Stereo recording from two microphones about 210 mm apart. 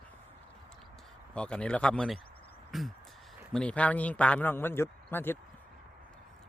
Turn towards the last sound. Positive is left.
turn(degrees=10)  # may be behind; listen again after turning